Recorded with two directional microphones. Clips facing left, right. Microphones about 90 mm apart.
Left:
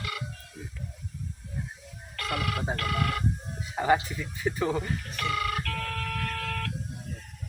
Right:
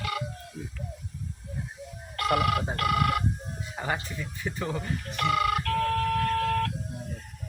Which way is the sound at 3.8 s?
15° left (ahead or behind).